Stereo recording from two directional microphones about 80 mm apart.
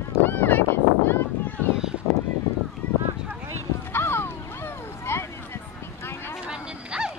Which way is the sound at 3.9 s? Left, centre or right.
Left.